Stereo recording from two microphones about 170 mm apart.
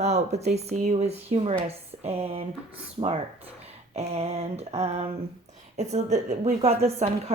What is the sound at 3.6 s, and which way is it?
Speech, 40° right (ahead or behind).